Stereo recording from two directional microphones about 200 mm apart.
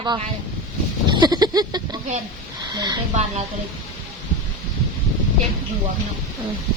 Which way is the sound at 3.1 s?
30° right (ahead or behind).